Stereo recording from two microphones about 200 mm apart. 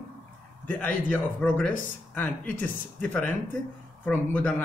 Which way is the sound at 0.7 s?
5° left (ahead or behind).